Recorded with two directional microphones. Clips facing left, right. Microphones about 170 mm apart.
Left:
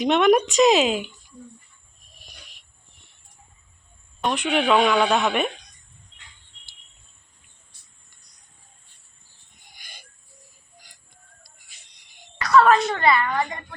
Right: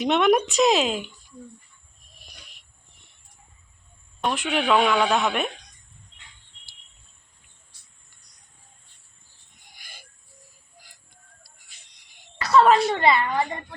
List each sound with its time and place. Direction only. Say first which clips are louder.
0.0 s a woman's voice: left 2 dB; centre (ahead or behind)
4.2 s a woman's voice: left 2 dB; centre (ahead or behind)
9.7 s owl: even; centre (ahead or behind)
12.4 s a woman's voice: even; 25° right (ahead or behind)